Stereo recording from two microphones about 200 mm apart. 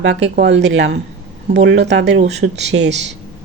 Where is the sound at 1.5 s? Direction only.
60° right (ahead or behind).